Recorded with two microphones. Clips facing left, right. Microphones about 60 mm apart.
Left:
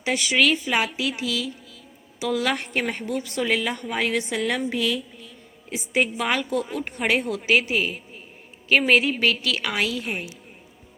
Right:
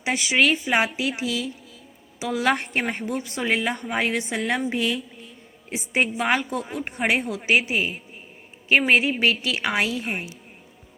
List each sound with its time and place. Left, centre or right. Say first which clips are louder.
0.0 s a woman's voice: even; right
7.2 s a woman's voice: left 1 dB; centre
7.4 s a woman's voice: right 1 dB; centre